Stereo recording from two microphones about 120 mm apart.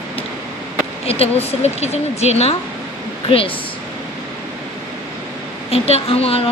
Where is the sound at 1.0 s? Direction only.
55° left (ahead or behind).